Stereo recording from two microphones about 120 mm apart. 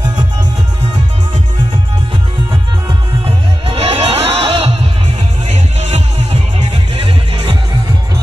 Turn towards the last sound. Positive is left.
turn(degrees=-50)  # may be behind; listen again after turning